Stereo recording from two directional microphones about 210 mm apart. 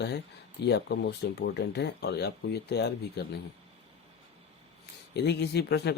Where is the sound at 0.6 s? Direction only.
55° left (ahead or behind).